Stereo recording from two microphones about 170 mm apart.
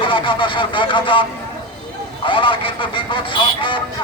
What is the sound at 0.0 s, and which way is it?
Speech, 30° left (ahead or behind).